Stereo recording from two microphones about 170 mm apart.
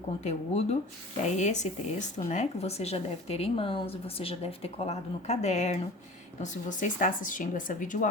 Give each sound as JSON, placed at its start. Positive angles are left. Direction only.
{"t": 0.3, "sound": "speech", "side_deg": 40}